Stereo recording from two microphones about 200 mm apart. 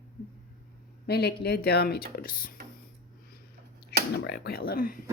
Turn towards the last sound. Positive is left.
turn(degrees=45)  # may be behind; listen again after turning